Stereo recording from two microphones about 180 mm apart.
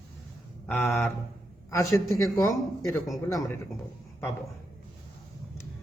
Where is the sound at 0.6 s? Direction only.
15° left (ahead or behind).